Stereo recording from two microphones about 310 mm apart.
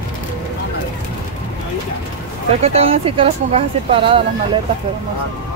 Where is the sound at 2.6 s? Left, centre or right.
Centre.